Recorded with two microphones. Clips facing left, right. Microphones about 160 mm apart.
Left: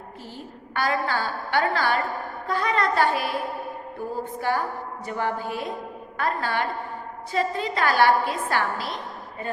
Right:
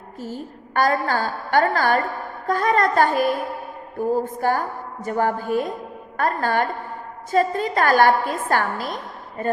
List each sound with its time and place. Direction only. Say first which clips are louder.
0.2 s a woman's voice: right 11 dB; 45° right (ahead or behind)